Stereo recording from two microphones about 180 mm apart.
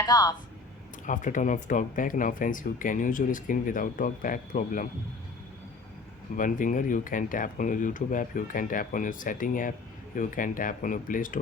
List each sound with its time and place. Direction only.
0.0 s speech: 20° left (ahead or behind)
1.0 s speech: 45° left (ahead or behind)
6.3 s speech: 45° left (ahead or behind)